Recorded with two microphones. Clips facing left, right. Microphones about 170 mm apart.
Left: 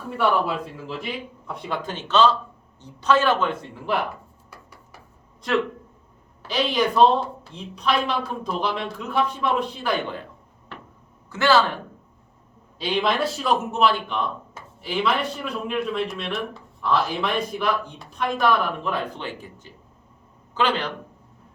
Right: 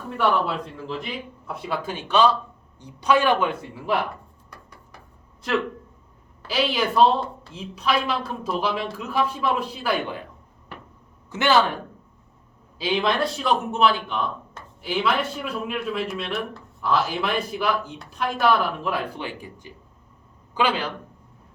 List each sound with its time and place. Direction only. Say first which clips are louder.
0.2 s a man's voice: even; 5° left (ahead or behind)
4.5 s dishes: even; 5° left (ahead or behind)
6.5 s speech: left 1 dB; 5° right (ahead or behind)
11.3 s speech: left 1 dB; 20° right (ahead or behind)
12.8 s a man's voice: even; centre (ahead or behind)